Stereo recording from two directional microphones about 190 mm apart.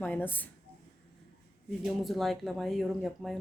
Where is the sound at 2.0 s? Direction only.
Centre (ahead or behind).